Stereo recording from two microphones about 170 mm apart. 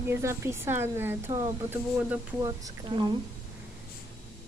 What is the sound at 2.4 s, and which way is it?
Speech, 20° right (ahead or behind).